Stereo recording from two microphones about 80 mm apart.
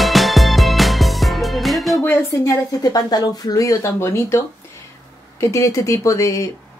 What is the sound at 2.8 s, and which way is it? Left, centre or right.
Speech, left.